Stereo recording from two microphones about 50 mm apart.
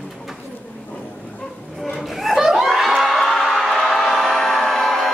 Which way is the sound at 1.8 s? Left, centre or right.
Centre.